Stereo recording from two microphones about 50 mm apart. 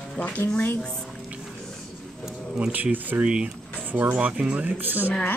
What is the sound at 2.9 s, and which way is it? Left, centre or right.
Speech, right.